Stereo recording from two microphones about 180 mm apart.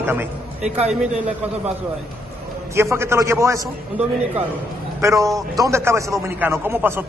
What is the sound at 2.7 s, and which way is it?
Speech, 15° right (ahead or behind).